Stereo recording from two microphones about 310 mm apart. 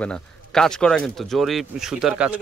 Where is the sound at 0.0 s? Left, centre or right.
Centre.